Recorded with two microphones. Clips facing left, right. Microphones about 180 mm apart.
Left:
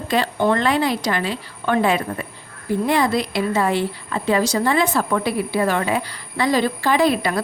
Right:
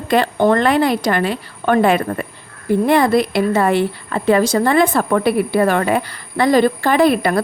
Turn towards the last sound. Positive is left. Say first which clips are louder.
# right 4 dB
turn(degrees=-55)  # may be behind; listen again after turning